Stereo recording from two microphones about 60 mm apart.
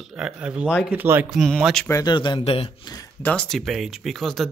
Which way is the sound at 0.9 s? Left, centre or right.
Right.